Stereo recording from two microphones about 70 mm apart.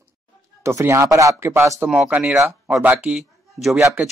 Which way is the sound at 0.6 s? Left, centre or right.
Right.